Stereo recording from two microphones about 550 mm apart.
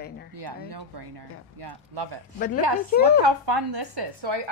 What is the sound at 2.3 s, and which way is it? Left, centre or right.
Speech, centre.